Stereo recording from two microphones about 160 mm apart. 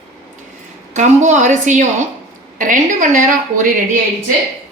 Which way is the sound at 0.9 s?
50° right (ahead or behind).